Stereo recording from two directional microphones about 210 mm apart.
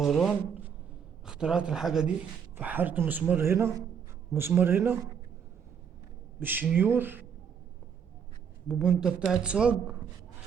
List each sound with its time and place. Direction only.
0.0 s a man's voice: centre (ahead or behind)
6.4 s a man's voice: 10° right (ahead or behind)
8.6 s speech: 5° right (ahead or behind)